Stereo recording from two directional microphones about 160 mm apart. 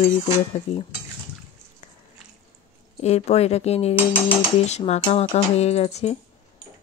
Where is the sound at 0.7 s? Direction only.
40° left (ahead or behind).